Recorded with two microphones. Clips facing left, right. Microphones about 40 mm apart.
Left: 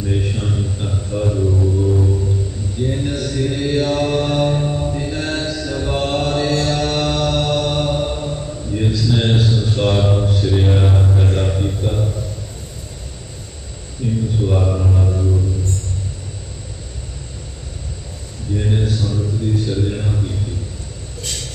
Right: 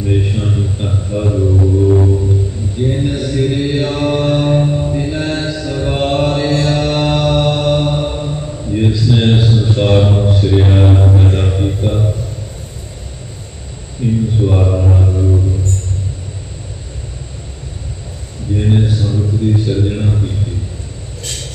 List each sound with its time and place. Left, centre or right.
0.0 s mantra: right
1.6 s music: right
3.1 s mantra: right
8.8 s a sound: right
11.1 s music: right
14.0 s a sound: right
14.5 s mantra: centre
15.0 s music: centre
18.6 s a sound: right